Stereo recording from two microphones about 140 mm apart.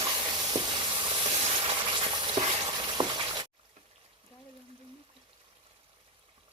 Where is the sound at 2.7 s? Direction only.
35° right (ahead or behind).